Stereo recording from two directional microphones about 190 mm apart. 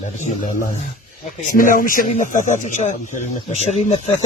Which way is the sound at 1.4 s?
45° left (ahead or behind).